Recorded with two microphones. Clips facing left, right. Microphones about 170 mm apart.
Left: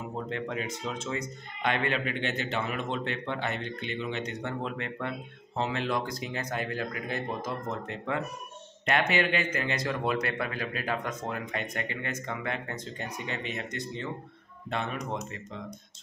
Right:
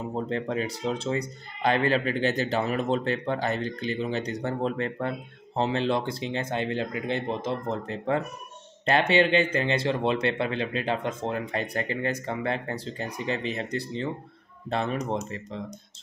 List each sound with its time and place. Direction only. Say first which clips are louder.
0.1 s speech: right 5 dB; 35° right (ahead or behind)